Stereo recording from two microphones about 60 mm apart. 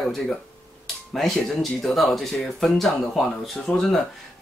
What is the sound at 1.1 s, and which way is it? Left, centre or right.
Speech, centre.